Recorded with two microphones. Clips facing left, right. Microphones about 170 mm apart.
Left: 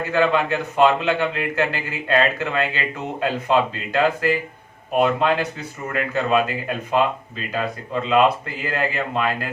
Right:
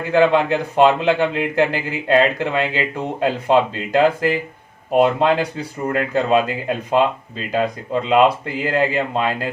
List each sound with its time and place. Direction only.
0.1 s a man's voice: 30° right (ahead or behind)
8.6 s a man's voice: 30° right (ahead or behind)